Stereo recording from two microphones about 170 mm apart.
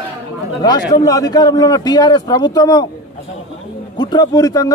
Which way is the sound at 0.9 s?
20° left (ahead or behind).